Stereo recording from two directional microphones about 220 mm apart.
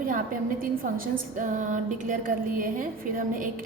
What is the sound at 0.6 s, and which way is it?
A woman's voice, 40° right (ahead or behind).